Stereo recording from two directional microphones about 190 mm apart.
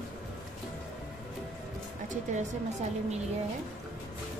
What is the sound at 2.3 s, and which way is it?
Speech, 35° right (ahead or behind).